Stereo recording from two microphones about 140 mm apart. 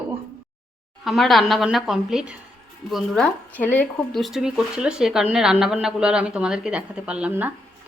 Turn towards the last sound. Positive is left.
turn(degrees=-15)  # may be behind; listen again after turning